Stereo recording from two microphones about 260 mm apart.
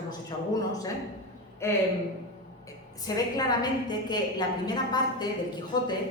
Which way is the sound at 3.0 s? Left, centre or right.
Centre.